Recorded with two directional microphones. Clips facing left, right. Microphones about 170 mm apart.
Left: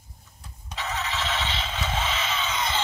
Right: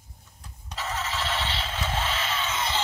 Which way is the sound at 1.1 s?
10° right (ahead or behind).